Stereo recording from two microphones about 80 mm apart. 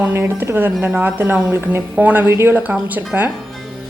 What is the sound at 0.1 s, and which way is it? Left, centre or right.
A woman's voice, right.